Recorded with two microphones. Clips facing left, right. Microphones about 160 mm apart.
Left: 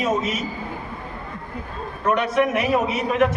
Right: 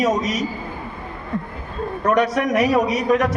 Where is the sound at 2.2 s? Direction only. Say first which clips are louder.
Right 3 dB; 40° right (ahead or behind).